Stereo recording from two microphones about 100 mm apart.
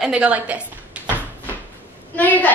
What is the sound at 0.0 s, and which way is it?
Speech, 10° right (ahead or behind).